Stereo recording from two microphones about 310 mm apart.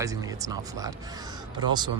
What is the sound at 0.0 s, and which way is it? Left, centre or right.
Speech, centre.